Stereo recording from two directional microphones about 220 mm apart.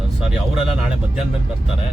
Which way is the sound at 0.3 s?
Centre (ahead or behind).